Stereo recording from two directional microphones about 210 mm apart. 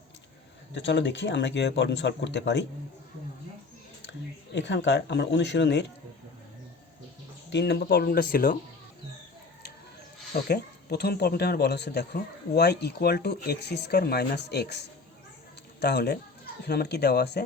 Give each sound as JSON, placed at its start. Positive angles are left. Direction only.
{"t": 0.7, "sound": "speech", "side_deg": 60}
{"t": 4.5, "sound": "speech", "side_deg": 55}
{"t": 7.5, "sound": "speech", "side_deg": 50}
{"t": 10.3, "sound": "speech", "side_deg": 50}